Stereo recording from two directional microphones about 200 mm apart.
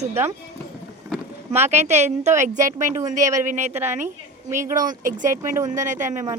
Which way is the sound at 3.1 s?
40° right (ahead or behind).